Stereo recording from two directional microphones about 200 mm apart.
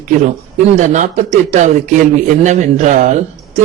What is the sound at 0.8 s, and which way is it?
A man's voice, 35° right (ahead or behind).